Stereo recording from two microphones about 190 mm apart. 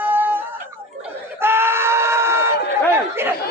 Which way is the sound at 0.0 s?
10° right (ahead or behind).